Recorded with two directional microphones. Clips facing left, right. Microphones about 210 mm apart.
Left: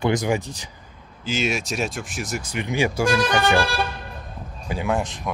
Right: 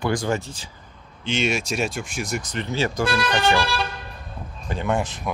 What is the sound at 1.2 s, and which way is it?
Speech, centre (ahead or behind).